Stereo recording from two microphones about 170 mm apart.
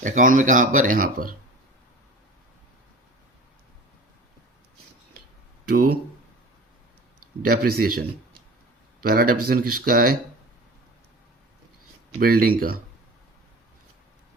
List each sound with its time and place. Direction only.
0.0 s speech: 50° right (ahead or behind)
5.6 s speech: 60° right (ahead or behind)
7.4 s speech: 60° right (ahead or behind)
9.0 s speech: 60° right (ahead or behind)
12.2 s speech: 60° right (ahead or behind)